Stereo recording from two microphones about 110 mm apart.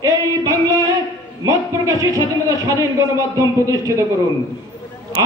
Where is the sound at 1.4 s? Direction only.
30° right (ahead or behind).